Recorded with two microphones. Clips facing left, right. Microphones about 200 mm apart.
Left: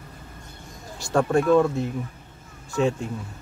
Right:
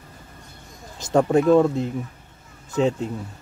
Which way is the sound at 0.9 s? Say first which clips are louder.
Right 3 dB; 20° right (ahead or behind).